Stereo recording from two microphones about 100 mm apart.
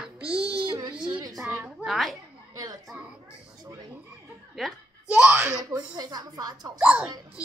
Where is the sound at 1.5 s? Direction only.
15° right (ahead or behind).